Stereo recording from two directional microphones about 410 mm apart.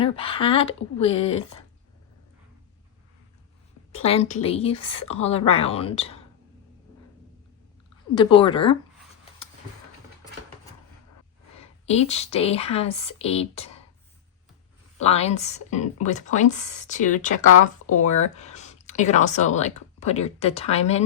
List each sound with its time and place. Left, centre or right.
0.0 s a woman's voice: centre
3.9 s a woman's voice: centre
4.7 s speech: left
5.0 s a woman's voice: centre
8.1 s a woman's voice: centre
11.9 s a woman's voice: centre
15.0 s a woman's voice: centre